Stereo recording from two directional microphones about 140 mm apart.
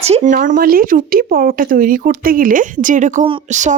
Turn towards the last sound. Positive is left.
turn(degrees=-60)  # may be behind; listen again after turning